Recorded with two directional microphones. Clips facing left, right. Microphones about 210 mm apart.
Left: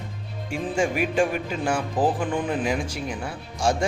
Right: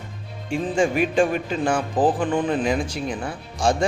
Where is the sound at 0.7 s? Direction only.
10° left (ahead or behind).